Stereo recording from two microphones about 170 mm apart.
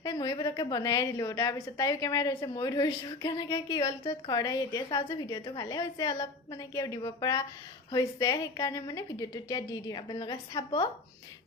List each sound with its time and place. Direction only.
0.0 s a woman's voice: 25° left (ahead or behind)